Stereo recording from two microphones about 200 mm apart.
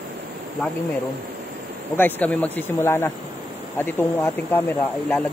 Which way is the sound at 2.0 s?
10° left (ahead or behind).